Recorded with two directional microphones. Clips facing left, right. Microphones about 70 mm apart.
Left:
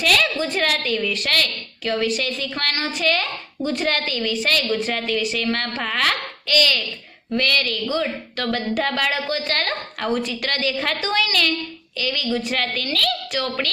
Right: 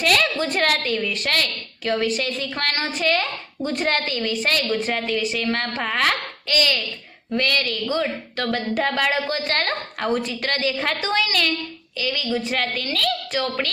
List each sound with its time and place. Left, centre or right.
0.0 s a sound: right
0.4 s a woman's voice: right
1.0 s a woman's voice: right
4.9 s a woman's voice: centre
12.0 s a woman's voice: centre